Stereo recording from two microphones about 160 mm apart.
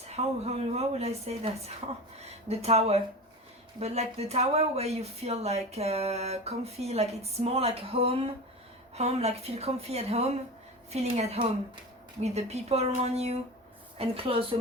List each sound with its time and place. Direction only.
0.1 s speech: 40° right (ahead or behind)